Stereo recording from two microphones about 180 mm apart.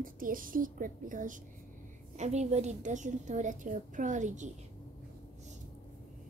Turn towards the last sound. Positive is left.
turn(degrees=-45)  # may be behind; listen again after turning